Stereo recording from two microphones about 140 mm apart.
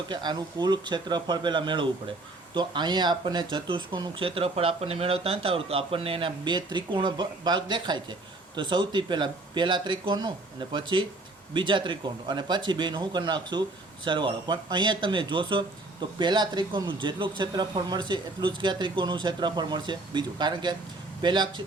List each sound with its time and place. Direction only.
0.1 s speech: 30° right (ahead or behind)